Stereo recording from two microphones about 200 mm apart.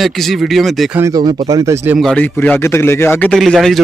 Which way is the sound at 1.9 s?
5° left (ahead or behind).